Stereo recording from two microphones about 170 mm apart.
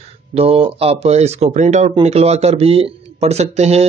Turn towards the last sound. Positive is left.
turn(degrees=-40)  # may be behind; listen again after turning